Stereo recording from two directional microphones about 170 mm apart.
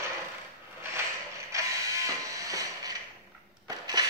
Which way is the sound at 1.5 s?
20° right (ahead or behind).